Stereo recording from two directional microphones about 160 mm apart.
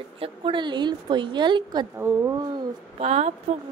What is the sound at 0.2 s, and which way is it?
A woman's voice, 30° right (ahead or behind).